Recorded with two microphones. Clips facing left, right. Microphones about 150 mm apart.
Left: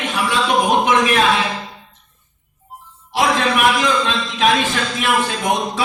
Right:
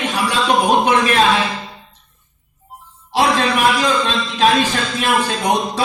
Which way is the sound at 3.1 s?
30° right (ahead or behind).